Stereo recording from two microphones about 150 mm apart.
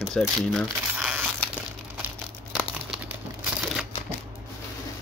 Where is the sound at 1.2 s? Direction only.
10° right (ahead or behind).